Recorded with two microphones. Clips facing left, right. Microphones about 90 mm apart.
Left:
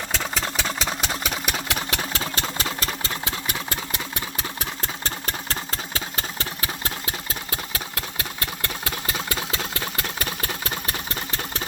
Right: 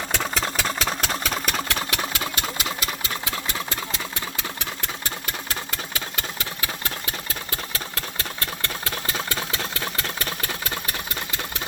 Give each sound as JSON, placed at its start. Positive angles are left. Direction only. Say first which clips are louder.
{"t": 0.1, "sound": "engine", "louder": "right 2 dB", "side_deg": 0}
{"t": 1.9, "sound": "engine", "louder": "even", "side_deg": 30}
{"t": 4.6, "sound": "engine", "louder": "left 1 dB", "side_deg": 30}